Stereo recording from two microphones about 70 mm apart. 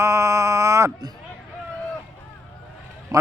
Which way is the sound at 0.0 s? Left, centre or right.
Right.